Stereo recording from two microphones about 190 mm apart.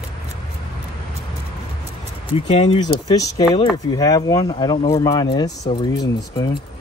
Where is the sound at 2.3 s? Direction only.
30° left (ahead or behind).